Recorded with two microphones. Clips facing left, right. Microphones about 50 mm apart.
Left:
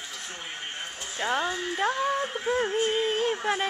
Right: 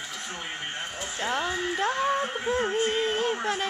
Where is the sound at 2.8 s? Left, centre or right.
Centre.